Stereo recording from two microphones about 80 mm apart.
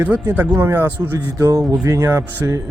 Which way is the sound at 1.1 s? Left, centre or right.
Right.